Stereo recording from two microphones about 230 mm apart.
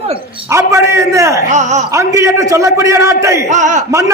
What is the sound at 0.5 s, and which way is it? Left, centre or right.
A man's voice, centre.